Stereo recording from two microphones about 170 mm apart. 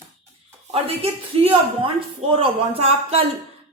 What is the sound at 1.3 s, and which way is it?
A woman's voice, 35° right (ahead or behind).